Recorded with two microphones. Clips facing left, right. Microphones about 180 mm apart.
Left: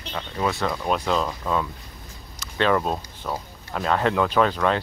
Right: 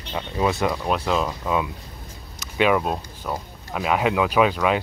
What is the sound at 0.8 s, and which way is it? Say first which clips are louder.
Speech: right 1 dB; 5° right (ahead or behind).